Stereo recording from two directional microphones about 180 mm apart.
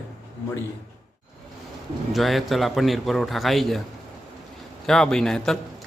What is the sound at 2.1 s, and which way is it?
A man's voice, centre (ahead or behind).